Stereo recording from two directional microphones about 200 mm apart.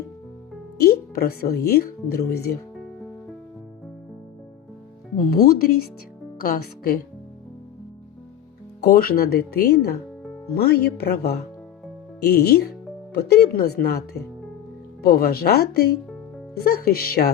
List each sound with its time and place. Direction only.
0.8 s speech: 50° left (ahead or behind)
5.1 s speech: 45° left (ahead or behind)
8.8 s speech: 45° left (ahead or behind)